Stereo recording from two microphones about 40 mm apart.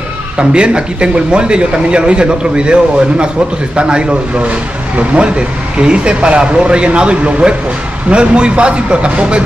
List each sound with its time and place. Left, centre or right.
0.4 s speech: right